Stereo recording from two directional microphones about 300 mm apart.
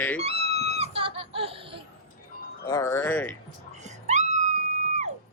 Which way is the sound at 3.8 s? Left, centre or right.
Right.